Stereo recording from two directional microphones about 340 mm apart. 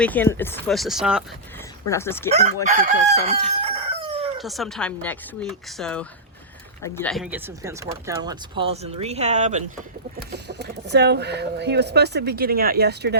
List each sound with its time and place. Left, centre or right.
0.0 s speech: centre
2.6 s crowing: right
4.4 s speech: centre; by 13.1 s right